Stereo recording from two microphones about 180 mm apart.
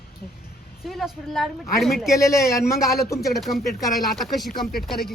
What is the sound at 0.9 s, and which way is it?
Speech, centre (ahead or behind).